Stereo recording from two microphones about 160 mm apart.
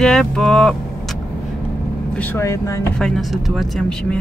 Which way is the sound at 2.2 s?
15° left (ahead or behind).